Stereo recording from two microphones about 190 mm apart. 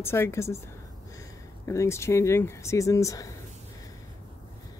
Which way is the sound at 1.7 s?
15° left (ahead or behind).